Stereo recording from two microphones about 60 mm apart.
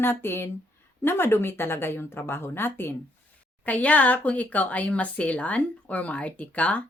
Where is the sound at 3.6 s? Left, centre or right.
Left.